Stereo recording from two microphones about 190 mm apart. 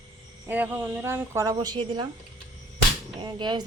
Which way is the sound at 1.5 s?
25° right (ahead or behind).